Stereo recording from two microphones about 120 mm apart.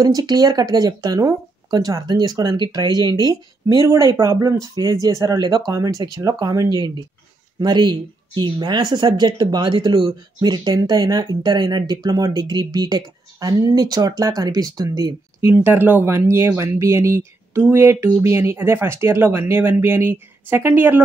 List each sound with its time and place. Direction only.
0.0 s speech: 35° right (ahead or behind)
15.4 s speech: 15° right (ahead or behind)